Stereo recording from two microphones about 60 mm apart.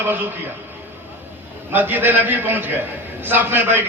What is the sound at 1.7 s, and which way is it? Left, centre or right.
A man's voice, right.